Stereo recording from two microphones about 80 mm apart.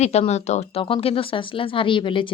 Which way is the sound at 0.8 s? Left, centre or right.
Left.